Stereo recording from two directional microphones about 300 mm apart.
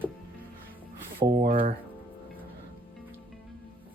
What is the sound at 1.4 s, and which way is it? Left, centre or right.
Speech, right.